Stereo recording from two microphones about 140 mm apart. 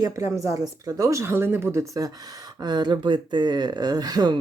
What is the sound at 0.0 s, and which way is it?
Speech, 20° right (ahead or behind).